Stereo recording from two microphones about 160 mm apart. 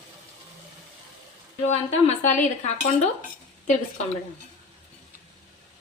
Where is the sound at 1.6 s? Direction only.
45° left (ahead or behind).